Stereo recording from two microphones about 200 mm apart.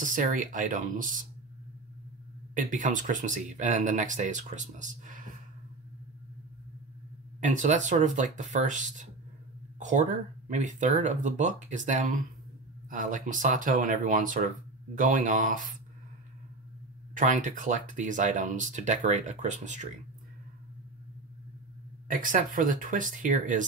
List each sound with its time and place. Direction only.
0.0 s speech: 40° right (ahead or behind)
2.5 s speech: 40° right (ahead or behind)
7.3 s speech: 40° right (ahead or behind)
17.1 s speech: 40° right (ahead or behind)
22.0 s speech: 40° right (ahead or behind)